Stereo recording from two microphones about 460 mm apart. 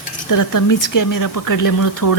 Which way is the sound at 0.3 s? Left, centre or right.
Left.